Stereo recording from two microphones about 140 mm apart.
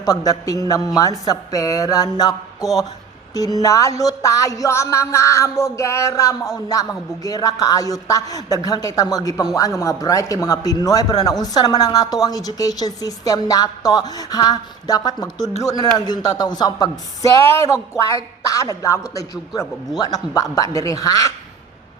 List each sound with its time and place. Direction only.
0.0 s a man's voice: 25° left (ahead or behind)